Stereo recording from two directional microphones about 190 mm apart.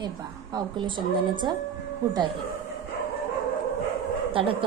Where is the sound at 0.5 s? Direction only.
25° right (ahead or behind).